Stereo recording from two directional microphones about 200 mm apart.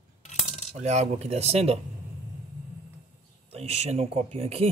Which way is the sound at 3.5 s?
30° right (ahead or behind).